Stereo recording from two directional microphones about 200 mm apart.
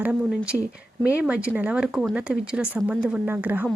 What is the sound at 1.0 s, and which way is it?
Speech, 5° right (ahead or behind).